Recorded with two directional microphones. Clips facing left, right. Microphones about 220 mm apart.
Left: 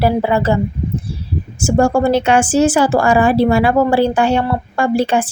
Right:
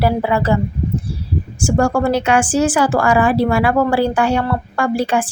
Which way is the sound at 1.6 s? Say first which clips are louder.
Left 3 dB; 25° left (ahead or behind).